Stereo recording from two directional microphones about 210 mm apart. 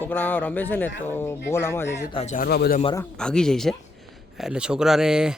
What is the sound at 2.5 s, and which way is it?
Speech, 45° left (ahead or behind).